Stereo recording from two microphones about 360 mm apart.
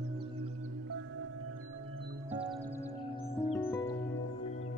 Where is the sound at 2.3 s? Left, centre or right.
Centre.